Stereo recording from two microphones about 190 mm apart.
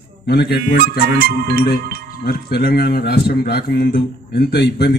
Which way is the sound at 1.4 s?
55° right (ahead or behind).